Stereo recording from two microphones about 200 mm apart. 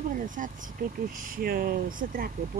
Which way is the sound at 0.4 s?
40° right (ahead or behind).